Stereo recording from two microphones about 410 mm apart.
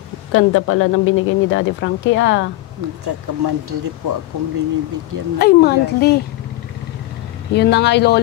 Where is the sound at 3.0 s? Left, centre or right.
Right.